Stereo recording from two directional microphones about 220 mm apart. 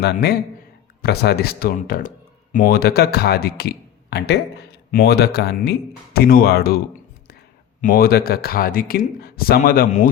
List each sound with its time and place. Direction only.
0.0 s speech: 45° left (ahead or behind)
7.8 s speech: 40° left (ahead or behind)